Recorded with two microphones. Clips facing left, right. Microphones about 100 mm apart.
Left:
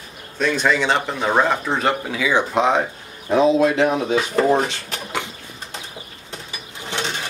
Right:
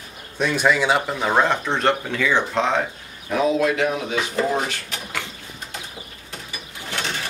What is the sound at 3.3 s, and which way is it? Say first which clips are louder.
Speech: left 4 dB; 25° left (ahead or behind).